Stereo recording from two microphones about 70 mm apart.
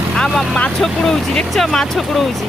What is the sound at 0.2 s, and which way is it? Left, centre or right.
Speech, centre.